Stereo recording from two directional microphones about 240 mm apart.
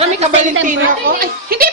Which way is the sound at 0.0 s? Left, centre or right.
Right.